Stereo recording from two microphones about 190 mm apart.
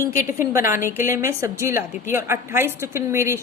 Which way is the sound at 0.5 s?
15° right (ahead or behind).